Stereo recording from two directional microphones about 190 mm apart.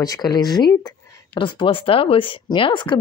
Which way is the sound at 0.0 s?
20° left (ahead or behind).